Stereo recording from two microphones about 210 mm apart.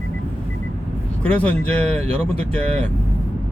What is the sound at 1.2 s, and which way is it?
Speech, 5° left (ahead or behind).